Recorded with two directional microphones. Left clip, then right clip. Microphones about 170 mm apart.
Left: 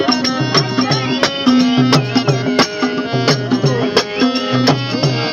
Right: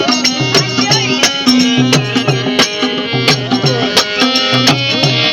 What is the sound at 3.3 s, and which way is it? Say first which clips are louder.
Music: right 4 dB; 75° left (ahead or behind).